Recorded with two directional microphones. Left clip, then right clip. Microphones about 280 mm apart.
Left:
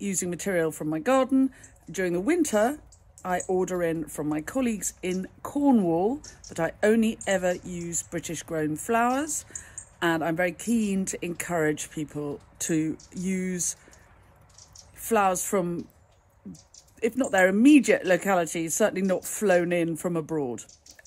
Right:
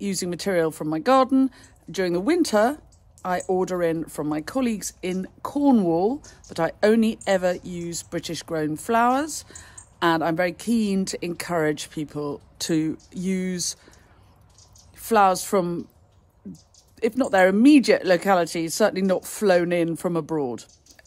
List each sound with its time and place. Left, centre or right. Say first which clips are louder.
0.0 s speech: right 3 dB; centre
15.0 s speech: right 5 dB; centre
17.0 s speech: right 4 dB; centre